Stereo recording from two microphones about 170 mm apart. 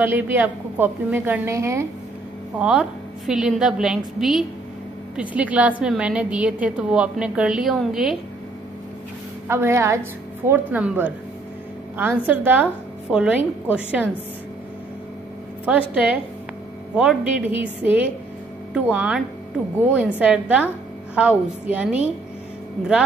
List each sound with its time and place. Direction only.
0.0 s a woman's voice: 10° right (ahead or behind)
2.6 s a woman's voice: 5° right (ahead or behind)
9.5 s a woman's voice: 15° right (ahead or behind)
15.6 s a woman's voice: 10° right (ahead or behind)